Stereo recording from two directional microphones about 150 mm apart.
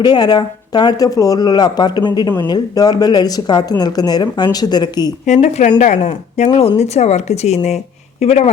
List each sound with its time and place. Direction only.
0.0 s speech: 30° left (ahead or behind)
5.2 s speech: 50° left (ahead or behind)